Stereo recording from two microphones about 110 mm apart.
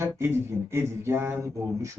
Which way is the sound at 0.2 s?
25° right (ahead or behind).